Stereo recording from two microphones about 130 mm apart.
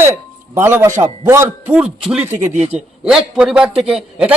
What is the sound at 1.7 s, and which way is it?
A man's voice, 5° right (ahead or behind).